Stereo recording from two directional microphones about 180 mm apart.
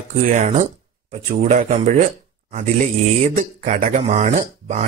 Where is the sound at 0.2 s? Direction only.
45° right (ahead or behind).